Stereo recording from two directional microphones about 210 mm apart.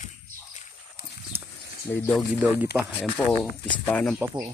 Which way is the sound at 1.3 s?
10° right (ahead or behind).